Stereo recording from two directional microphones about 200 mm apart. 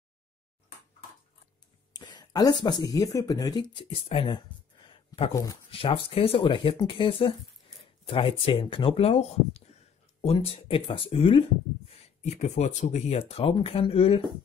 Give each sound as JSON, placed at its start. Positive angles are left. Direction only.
{"t": 2.0, "sound": "a sound", "side_deg": 20}
{"t": 2.6, "sound": "speech", "side_deg": 20}
{"t": 3.7, "sound": "speech", "side_deg": 25}
{"t": 5.7, "sound": "speech", "side_deg": 30}